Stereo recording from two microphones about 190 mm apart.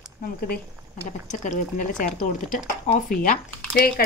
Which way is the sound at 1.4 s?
40° left (ahead or behind).